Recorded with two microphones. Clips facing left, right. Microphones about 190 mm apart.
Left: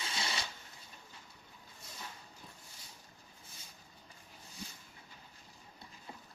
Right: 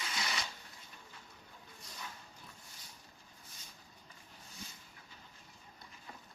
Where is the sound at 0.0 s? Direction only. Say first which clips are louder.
Even; 30° left (ahead or behind).